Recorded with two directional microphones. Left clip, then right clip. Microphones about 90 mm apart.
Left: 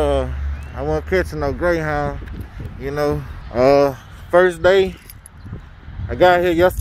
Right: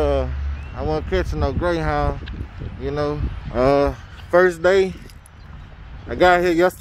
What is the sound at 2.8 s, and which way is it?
Speech, 30° left (ahead or behind).